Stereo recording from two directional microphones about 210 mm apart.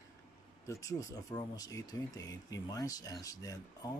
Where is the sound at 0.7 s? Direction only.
15° left (ahead or behind).